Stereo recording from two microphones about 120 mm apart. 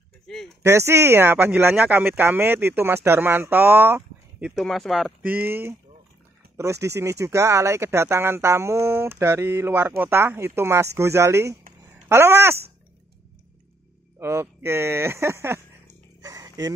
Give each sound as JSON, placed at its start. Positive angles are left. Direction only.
{"t": 0.6, "sound": "speech", "side_deg": -25}
{"t": 4.5, "sound": "speech", "side_deg": 0}
{"t": 5.2, "sound": "speech", "side_deg": -15}
{"t": 14.2, "sound": "speech", "side_deg": -20}
{"t": 16.2, "sound": "a sound", "side_deg": -30}